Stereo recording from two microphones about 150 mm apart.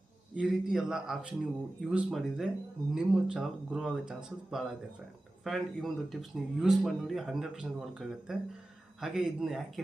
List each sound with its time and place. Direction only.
0.3 s speech: 5° right (ahead or behind)